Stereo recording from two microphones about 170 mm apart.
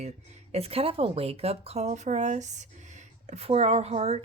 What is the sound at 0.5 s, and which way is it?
Speech, 35° right (ahead or behind).